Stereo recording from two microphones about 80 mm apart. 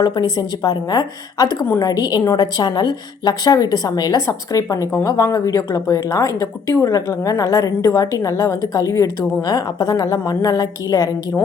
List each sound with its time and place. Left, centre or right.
0.0 s a woman's voice: left